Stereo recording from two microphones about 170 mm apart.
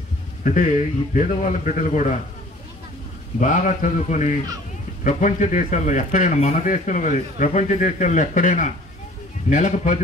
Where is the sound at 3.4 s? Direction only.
45° left (ahead or behind).